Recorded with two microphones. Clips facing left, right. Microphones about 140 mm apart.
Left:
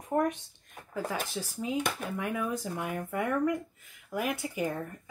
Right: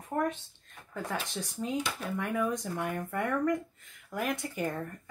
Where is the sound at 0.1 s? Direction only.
20° left (ahead or behind).